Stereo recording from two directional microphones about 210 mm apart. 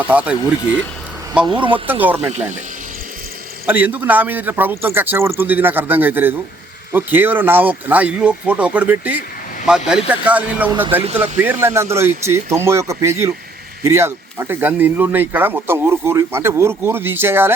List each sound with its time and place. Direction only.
0.0 s speech: 5° right (ahead or behind)
1.5 s speech: 25° right (ahead or behind)
1.7 s speech: 10° right (ahead or behind)
3.7 s speech: 10° right (ahead or behind)